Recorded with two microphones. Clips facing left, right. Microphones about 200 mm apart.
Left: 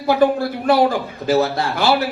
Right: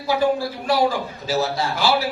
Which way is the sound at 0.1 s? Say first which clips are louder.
Left 4 dB; 55° left (ahead or behind).